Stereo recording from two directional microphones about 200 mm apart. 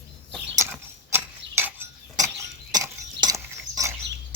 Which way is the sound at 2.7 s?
15° right (ahead or behind).